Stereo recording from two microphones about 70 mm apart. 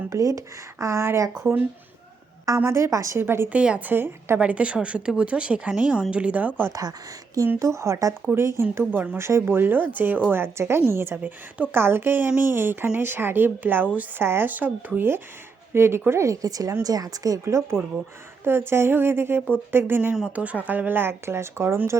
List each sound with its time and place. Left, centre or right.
0.1 s speech: right
2.6 s speech: right
3.2 s speech: right
3.5 s speech: centre
3.8 s speech: right
4.4 s speech: centre
7.6 s speech: right
11.2 s speech: right
11.8 s speech: right
17.4 s speech: right